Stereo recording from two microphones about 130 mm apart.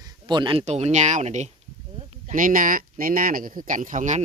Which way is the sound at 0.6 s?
60° right (ahead or behind).